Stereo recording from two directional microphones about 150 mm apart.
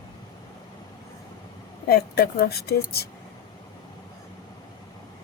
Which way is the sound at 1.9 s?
90° left.